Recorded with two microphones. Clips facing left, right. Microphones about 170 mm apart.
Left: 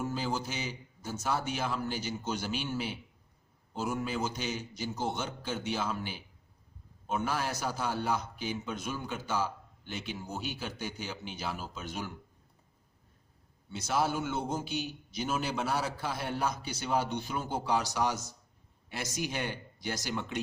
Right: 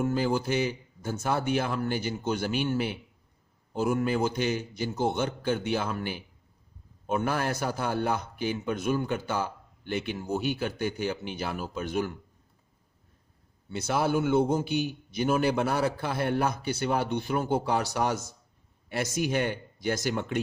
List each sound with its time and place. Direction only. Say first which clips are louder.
0.0 s a man's voice: right 7 dB; 55° right (ahead or behind)
13.7 s a man's voice: right 4 dB; 60° right (ahead or behind)